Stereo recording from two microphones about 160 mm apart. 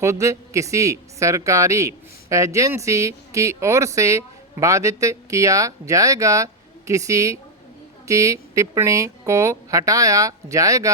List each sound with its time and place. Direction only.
0.0 s speech: 20° right (ahead or behind)